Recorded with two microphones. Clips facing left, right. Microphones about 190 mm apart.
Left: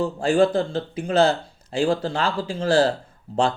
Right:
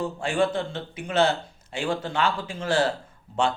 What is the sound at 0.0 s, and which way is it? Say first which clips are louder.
Speech: left 6 dB; 35° left (ahead or behind).